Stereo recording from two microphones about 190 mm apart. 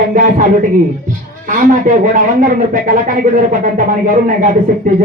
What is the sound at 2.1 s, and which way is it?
Speech, 45° right (ahead or behind).